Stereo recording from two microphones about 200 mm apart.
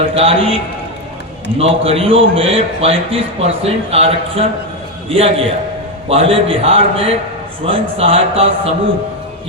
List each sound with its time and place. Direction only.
0.1 s a man's voice: 30° right (ahead or behind)